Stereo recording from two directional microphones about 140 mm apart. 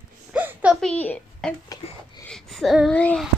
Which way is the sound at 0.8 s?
10° left (ahead or behind).